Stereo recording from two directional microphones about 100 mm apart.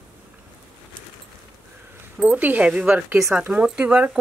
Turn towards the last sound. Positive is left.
turn(degrees=-10)  # may be behind; listen again after turning